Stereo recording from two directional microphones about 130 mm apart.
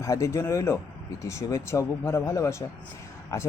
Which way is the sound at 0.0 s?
25° left (ahead or behind).